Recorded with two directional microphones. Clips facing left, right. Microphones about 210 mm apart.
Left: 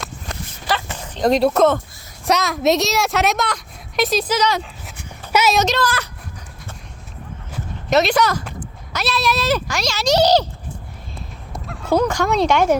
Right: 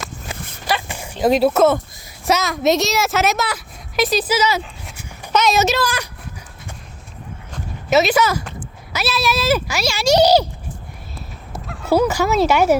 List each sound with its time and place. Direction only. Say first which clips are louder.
0.3 s a sound: right 1 dB; 5° right (ahead or behind)
2.2 s speech: even; centre (ahead or behind)
5.3 s speech: even; 10° left (ahead or behind)
5.5 s speech: right 1 dB; 5° right (ahead or behind)
7.9 s speech: right 1 dB; 5° right (ahead or behind)
11.5 s speech: right 1 dB; 5° right (ahead or behind)